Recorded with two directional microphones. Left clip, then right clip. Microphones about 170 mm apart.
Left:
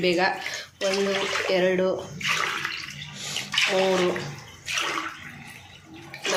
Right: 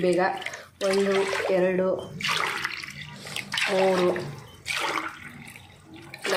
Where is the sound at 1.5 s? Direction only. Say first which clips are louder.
Left 2 dB; 35° right (ahead or behind).